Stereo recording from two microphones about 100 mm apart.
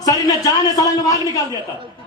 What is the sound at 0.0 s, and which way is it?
A man's voice, 40° left (ahead or behind).